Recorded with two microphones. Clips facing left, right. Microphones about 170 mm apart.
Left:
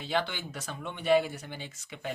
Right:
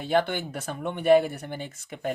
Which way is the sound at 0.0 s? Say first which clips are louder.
Right 7 dB; 50° right (ahead or behind).